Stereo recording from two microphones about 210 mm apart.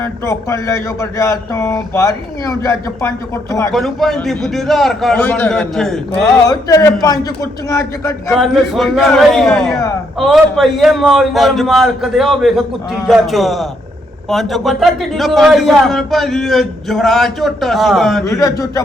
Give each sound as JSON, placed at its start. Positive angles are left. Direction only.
{"t": 0.0, "sound": "speech", "side_deg": 15}
{"t": 3.7, "sound": "a man's voice", "side_deg": 0}
{"t": 6.4, "sound": "speech", "side_deg": 15}
{"t": 8.3, "sound": "a man's voice", "side_deg": 0}
{"t": 18.3, "sound": "speech", "side_deg": 15}